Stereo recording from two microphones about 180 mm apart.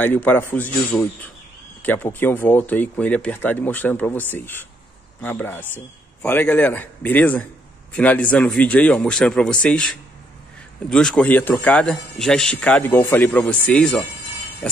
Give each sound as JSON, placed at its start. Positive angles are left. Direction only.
{"t": 0.0, "sound": "a man's voice", "side_deg": 10}